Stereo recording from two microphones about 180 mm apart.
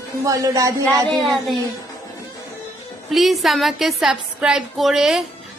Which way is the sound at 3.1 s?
Centre (ahead or behind).